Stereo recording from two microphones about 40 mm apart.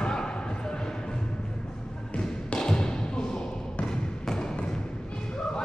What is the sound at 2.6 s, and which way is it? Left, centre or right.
Thump, centre.